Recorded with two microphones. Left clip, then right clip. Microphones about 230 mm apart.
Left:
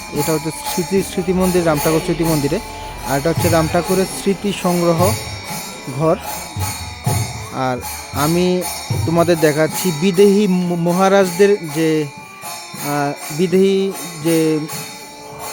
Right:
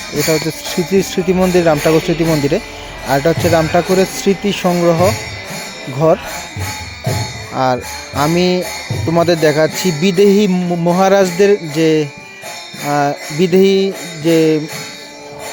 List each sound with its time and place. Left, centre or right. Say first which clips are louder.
0.3 s jingle bell: right 6 dB; centre
7.5 s jingle bell: right 6 dB; centre